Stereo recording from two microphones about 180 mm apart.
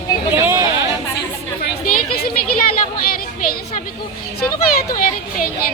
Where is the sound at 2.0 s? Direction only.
55° left (ahead or behind).